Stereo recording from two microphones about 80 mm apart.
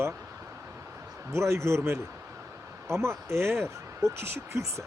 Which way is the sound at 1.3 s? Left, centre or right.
Right.